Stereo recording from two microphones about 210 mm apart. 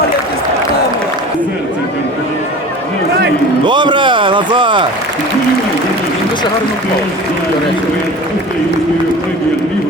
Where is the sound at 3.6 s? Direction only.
20° right (ahead or behind).